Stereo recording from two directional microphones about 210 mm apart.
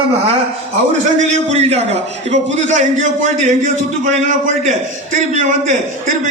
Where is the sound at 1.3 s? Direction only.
30° right (ahead or behind).